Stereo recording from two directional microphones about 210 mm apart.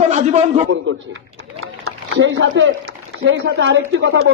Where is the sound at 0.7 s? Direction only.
65° right (ahead or behind).